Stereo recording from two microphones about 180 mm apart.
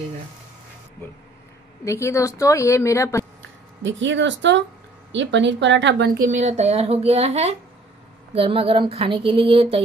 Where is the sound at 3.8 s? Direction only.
90° right; by 6.2 s 70° right (ahead or behind).